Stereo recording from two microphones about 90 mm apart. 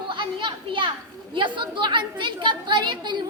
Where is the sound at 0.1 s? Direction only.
65° right (ahead or behind).